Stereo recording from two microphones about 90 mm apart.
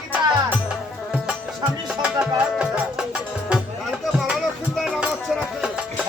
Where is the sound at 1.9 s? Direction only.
10° right (ahead or behind).